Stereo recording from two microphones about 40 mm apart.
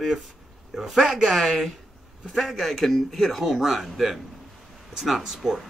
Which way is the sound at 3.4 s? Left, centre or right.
Centre.